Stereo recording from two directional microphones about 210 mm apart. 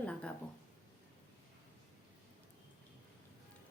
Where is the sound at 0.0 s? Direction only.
5° left (ahead or behind).